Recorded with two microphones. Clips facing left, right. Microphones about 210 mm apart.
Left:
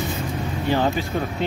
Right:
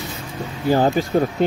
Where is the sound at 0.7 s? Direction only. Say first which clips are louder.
Right 5 dB; 40° right (ahead or behind).